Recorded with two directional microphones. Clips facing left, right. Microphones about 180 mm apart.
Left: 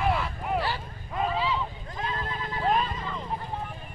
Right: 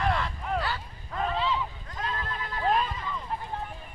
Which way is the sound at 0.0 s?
5° left (ahead or behind).